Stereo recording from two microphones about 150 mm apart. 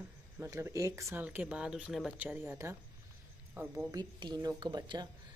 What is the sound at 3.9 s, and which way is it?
Speech, 30° right (ahead or behind).